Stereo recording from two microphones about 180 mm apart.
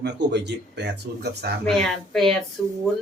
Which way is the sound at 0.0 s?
70° right (ahead or behind).